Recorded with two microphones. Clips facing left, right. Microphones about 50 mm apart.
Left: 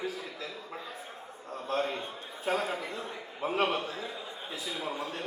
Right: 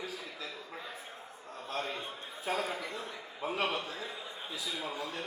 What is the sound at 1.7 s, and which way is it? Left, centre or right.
A man's voice, left.